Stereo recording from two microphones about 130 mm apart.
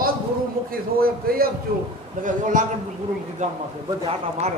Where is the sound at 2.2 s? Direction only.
80° right.